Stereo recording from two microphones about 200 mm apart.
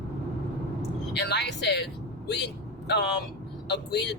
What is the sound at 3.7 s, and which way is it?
Speech, 60° left (ahead or behind).